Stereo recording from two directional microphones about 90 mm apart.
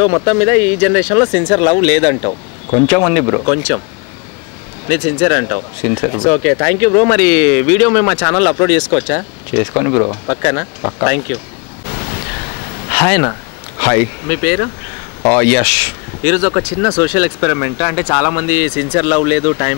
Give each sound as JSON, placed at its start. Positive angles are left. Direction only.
{"t": 0.0, "sound": "speech", "side_deg": 25}
{"t": 4.8, "sound": "speech", "side_deg": 25}
{"t": 12.9, "sound": "speech", "side_deg": 25}